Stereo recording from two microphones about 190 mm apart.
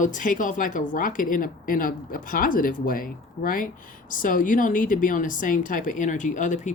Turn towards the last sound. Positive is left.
turn(degrees=40)  # may be behind; listen again after turning